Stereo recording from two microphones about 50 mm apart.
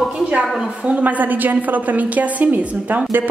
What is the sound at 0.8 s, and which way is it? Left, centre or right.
A woman's voice, right.